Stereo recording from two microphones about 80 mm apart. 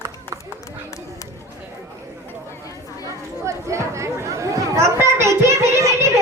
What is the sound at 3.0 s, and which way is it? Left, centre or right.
Chatter, right.